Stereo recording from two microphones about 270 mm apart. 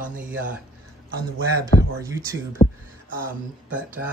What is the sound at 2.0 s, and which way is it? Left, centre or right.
Speech, centre.